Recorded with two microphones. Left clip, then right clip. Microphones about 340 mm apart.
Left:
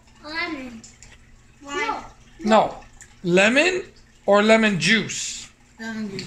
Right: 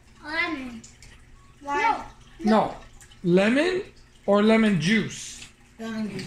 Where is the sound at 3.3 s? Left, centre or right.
Left.